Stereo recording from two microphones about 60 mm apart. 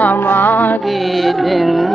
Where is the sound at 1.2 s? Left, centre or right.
Centre.